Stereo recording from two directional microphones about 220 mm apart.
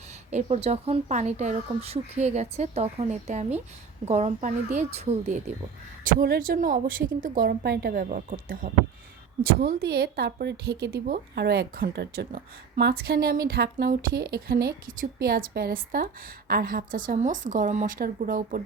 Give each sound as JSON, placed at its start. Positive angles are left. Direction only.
{"t": 0.3, "sound": "speech", "side_deg": -30}
{"t": 6.1, "sound": "a woman's voice", "side_deg": -40}